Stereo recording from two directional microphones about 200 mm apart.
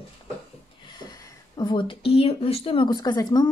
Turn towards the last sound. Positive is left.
turn(degrees=20)  # may be behind; listen again after turning